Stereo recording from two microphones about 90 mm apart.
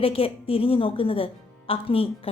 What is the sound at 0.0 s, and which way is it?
A woman's voice, 90° left.